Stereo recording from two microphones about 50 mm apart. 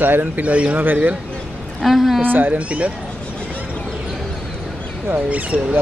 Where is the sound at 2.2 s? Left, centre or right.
Right.